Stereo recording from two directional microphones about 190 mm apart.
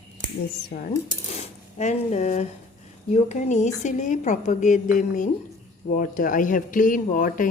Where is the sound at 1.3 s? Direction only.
35° left (ahead or behind).